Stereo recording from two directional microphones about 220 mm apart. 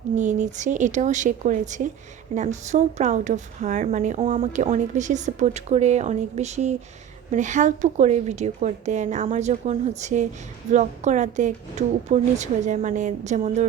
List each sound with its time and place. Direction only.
0.2 s a woman's voice: 35° right (ahead or behind)